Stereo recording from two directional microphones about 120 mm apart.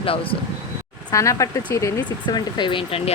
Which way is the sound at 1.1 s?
25° left (ahead or behind).